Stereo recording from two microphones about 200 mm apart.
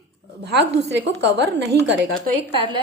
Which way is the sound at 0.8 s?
60° right (ahead or behind).